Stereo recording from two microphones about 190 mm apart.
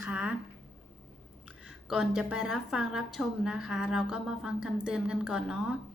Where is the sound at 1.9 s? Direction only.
Centre (ahead or behind).